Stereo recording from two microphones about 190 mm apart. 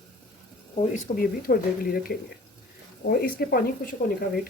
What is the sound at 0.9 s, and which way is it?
Speech, 50° left (ahead or behind).